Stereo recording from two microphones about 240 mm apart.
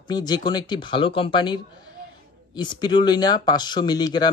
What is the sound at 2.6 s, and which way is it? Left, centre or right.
Speech, centre.